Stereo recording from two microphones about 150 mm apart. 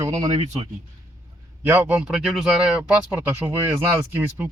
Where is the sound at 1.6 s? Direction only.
10° right (ahead or behind).